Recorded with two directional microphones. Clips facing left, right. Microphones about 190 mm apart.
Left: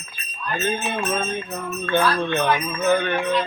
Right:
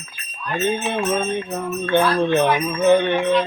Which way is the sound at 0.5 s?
25° right (ahead or behind).